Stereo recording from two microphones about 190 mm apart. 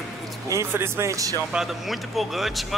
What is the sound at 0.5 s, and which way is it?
Speech, 15° right (ahead or behind).